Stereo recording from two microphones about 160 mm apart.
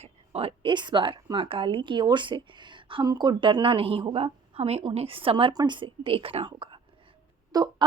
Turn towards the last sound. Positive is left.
turn(degrees=-25)  # may be behind; listen again after turning